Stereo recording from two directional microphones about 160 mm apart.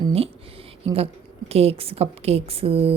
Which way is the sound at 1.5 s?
40° right (ahead or behind).